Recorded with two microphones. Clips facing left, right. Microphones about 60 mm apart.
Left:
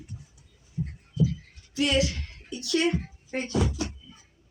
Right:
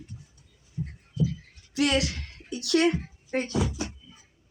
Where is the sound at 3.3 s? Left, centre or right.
Right.